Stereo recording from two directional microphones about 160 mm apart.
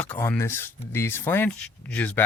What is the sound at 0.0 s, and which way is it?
Speech, 10° left (ahead or behind).